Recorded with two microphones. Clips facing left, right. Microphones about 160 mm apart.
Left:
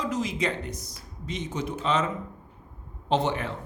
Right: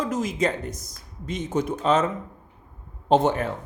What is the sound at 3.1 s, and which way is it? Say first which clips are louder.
Speech: right 6 dB; 45° right (ahead or behind).